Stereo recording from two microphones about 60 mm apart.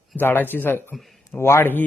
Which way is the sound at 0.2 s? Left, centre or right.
Left.